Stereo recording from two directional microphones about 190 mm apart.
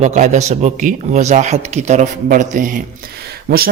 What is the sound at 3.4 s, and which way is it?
Speech, 50° right (ahead or behind).